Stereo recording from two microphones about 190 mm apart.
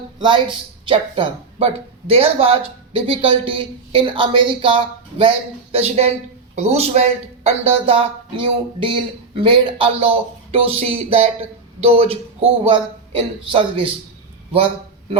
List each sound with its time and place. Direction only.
0.2 s speech: 25° right (ahead or behind)